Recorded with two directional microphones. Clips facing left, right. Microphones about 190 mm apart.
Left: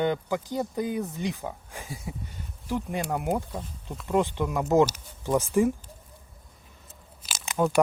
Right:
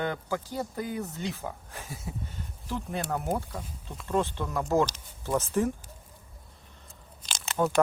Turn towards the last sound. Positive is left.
turn(degrees=10)  # may be behind; listen again after turning